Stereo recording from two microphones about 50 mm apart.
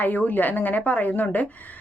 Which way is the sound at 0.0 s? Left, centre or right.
Left.